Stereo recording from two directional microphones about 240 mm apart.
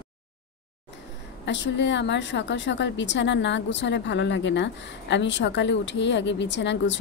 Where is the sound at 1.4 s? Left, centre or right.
Left.